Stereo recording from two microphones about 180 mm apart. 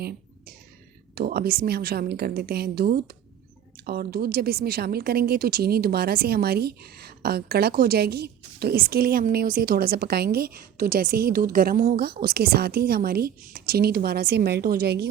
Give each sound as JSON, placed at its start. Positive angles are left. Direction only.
{"t": 1.1, "sound": "a woman's voice", "side_deg": -60}